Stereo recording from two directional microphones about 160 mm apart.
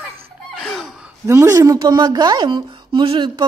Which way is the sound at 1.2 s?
20° right (ahead or behind).